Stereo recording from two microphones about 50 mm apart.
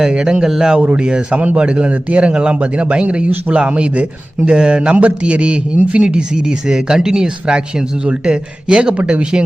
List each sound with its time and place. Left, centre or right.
0.0 s a man's voice: centre